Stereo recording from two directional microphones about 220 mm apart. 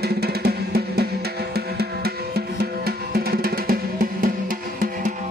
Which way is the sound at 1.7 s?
45° right (ahead or behind).